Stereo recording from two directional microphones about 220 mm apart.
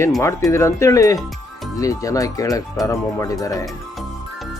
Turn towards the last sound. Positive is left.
turn(degrees=0)  # may be behind; listen again after turning